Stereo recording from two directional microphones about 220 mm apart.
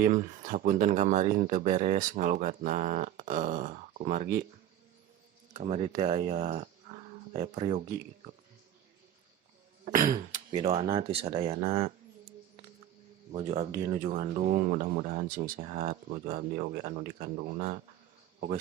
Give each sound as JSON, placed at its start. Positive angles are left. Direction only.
{"t": 0.0, "sound": "speech", "side_deg": -40}
{"t": 5.5, "sound": "speech", "side_deg": -30}
{"t": 9.8, "sound": "throat clearing", "side_deg": -40}
{"t": 10.5, "sound": "speech", "side_deg": -20}
{"t": 13.3, "sound": "speech", "side_deg": -30}